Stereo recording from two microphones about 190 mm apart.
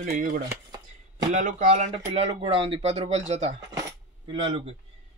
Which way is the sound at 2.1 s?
30° right (ahead or behind).